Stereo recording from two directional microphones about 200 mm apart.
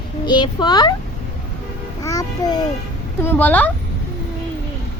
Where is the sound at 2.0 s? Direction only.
15° left (ahead or behind).